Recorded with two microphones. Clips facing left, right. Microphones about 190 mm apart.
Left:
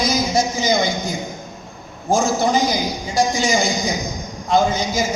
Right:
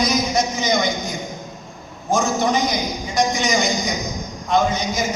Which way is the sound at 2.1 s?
30° left (ahead or behind).